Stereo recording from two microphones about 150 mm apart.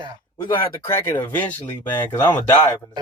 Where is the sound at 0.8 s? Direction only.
10° left (ahead or behind).